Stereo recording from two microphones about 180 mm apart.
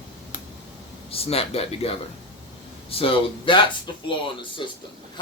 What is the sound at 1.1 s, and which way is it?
Speech, 35° left (ahead or behind).